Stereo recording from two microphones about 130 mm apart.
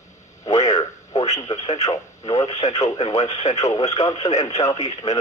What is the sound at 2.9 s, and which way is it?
Speech, 45° left (ahead or behind).